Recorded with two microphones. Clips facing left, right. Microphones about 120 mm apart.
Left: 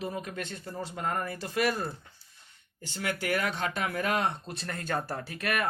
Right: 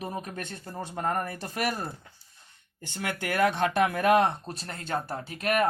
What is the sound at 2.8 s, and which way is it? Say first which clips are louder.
Speech: even; 50° right (ahead or behind).